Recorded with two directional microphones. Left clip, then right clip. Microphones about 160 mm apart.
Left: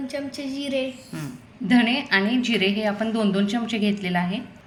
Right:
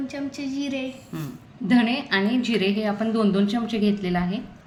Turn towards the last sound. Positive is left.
turn(degrees=-5)  # may be behind; listen again after turning